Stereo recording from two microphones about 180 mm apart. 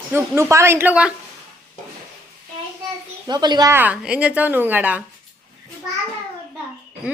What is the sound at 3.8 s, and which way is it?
Speech, 5° right (ahead or behind).